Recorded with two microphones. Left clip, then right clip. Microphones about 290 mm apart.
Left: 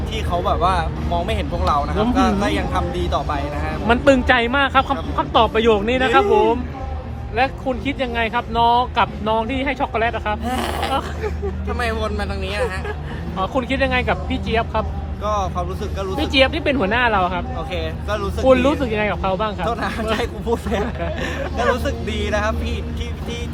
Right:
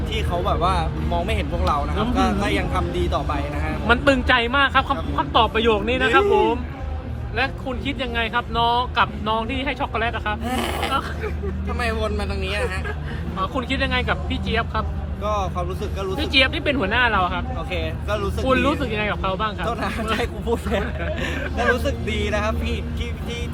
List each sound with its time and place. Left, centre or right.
0.1 s speech: centre
3.8 s speech: left
7.3 s speech: left
10.4 s speech: centre
13.4 s speech: left
15.2 s speech: centre
16.1 s speech: left
17.7 s speech: centre
18.4 s speech: left
19.6 s speech: centre